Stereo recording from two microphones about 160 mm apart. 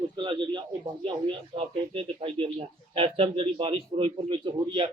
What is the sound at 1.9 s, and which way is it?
Speech, 35° right (ahead or behind).